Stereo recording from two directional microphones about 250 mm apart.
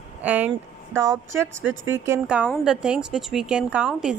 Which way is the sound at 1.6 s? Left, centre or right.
Right.